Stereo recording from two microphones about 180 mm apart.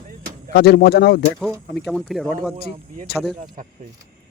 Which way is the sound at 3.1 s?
60° left (ahead or behind).